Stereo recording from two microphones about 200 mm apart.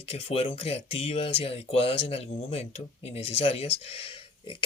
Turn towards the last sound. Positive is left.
turn(degrees=25)  # may be behind; listen again after turning